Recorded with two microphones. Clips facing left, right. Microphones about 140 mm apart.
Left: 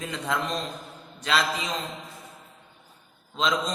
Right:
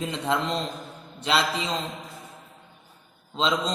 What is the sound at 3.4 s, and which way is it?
Speech, 30° right (ahead or behind).